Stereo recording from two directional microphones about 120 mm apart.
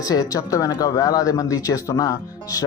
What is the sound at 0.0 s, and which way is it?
Speech, 30° left (ahead or behind).